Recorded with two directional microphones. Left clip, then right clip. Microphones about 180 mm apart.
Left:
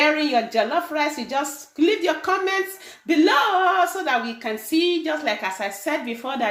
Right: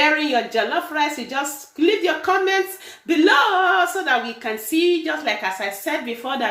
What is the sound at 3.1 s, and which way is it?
A woman's voice, 25° left (ahead or behind).